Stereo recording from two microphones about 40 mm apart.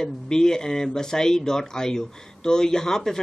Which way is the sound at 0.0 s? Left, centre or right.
Centre.